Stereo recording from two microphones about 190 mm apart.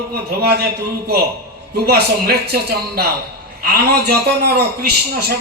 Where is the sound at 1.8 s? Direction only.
55° right (ahead or behind).